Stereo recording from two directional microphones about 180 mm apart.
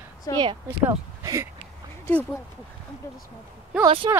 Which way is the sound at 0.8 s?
15° right (ahead or behind).